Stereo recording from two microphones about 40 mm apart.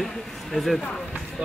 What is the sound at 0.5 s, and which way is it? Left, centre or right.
Speech, centre.